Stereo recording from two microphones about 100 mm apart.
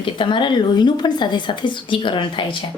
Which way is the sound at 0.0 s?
55° left (ahead or behind).